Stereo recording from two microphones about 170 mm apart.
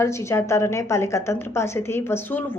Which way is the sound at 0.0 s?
15° left (ahead or behind).